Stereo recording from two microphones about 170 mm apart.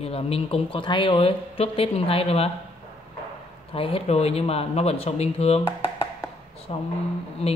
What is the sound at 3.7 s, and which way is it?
A man's voice, 35° left (ahead or behind).